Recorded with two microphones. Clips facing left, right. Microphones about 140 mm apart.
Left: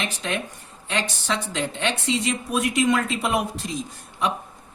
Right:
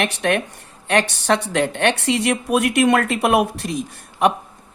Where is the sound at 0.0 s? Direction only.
65° right (ahead or behind).